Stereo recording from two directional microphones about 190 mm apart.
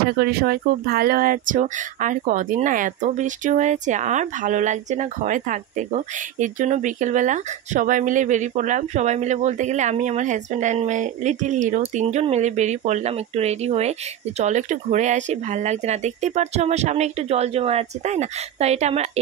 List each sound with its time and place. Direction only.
0.2 s speech: 55° right (ahead or behind); by 19.0 s 35° right (ahead or behind)